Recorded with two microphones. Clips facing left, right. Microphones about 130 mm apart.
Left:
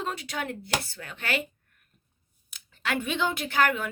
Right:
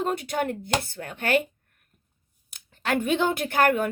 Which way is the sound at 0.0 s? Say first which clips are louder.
Right 6 dB; 50° right (ahead or behind).